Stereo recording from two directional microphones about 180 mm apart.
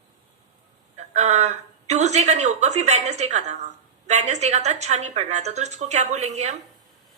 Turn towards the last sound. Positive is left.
turn(degrees=-40)  # may be behind; listen again after turning